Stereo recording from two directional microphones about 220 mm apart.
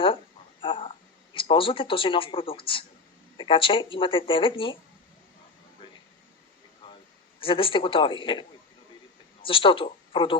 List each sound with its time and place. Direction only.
0.6 s a sound: 25° left (ahead or behind)
3.3 s speech: 25° left (ahead or behind)
7.3 s speech: 25° left (ahead or behind)